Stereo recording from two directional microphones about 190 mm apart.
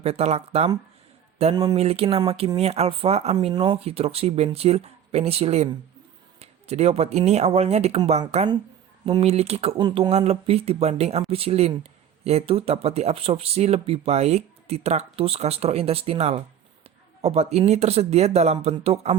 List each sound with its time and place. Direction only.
0.0 s speech: 35° right (ahead or behind)